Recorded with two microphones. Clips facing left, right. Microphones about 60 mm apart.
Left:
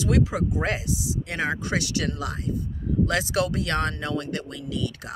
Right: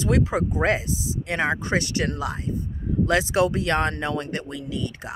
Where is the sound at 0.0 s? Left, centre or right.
Right.